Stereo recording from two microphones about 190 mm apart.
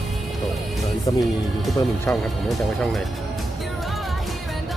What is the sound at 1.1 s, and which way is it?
Speech, 25° left (ahead or behind).